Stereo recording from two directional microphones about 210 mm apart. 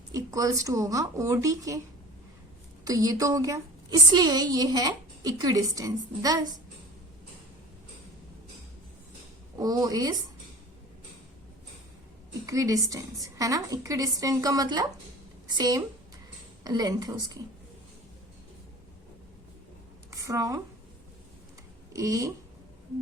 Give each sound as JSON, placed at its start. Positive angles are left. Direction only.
{"t": 0.1, "sound": "a woman's voice", "side_deg": -15}
{"t": 2.8, "sound": "a woman's voice", "side_deg": -15}
{"t": 9.6, "sound": "a woman's voice", "side_deg": -15}
{"t": 12.5, "sound": "a woman's voice", "side_deg": -15}
{"t": 20.1, "sound": "a sound", "side_deg": -15}
{"t": 21.9, "sound": "a woman's voice", "side_deg": -15}